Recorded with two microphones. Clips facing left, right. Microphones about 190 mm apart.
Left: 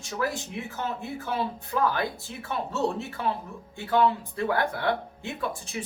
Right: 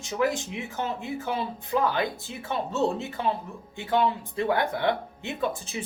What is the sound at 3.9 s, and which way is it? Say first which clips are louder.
Speech: left 1 dB; 20° right (ahead or behind).